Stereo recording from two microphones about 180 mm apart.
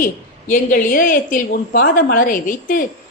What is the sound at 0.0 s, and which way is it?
A woman's voice, 50° left (ahead or behind).